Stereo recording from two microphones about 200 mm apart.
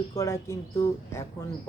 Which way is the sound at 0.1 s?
15° left (ahead or behind).